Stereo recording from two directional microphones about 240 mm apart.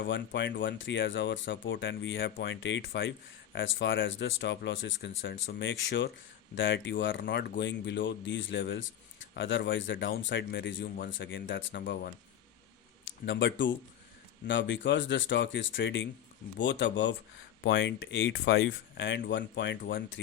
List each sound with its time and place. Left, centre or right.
0.6 s speech: left